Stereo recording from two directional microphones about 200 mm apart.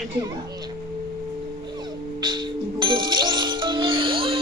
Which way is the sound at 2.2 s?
20° right (ahead or behind).